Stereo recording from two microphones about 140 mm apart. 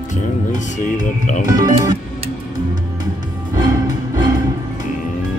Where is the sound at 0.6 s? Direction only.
70° left (ahead or behind).